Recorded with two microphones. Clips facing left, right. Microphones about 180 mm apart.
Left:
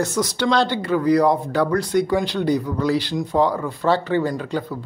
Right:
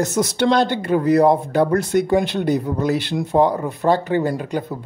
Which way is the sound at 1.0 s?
25° right (ahead or behind).